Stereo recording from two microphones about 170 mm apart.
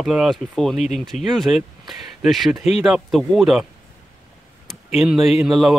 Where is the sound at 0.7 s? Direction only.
45° left (ahead or behind).